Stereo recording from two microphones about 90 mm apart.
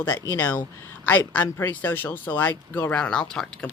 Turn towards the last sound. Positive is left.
turn(degrees=10)  # may be behind; listen again after turning